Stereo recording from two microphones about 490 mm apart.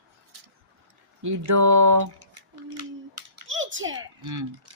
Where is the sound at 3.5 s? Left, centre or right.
Right.